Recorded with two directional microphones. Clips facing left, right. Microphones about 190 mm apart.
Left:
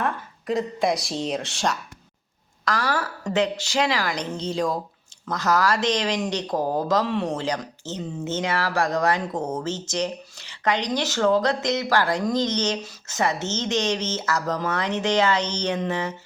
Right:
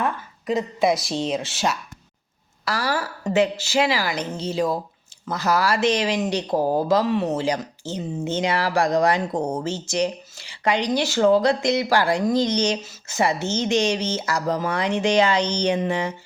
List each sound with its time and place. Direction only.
0.0 s a woman's voice: centre (ahead or behind)